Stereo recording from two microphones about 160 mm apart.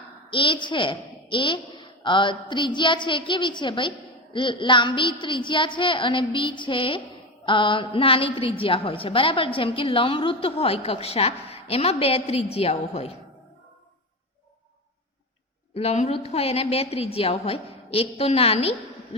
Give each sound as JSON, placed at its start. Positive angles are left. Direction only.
{"t": 0.3, "sound": "a woman's voice", "side_deg": 30}
{"t": 15.7, "sound": "a woman's voice", "side_deg": 40}